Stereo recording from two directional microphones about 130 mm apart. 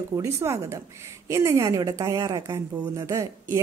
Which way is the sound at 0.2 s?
20° right (ahead or behind).